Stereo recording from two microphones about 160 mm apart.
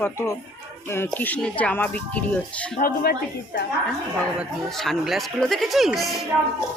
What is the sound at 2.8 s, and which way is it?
Speech, 70° left (ahead or behind).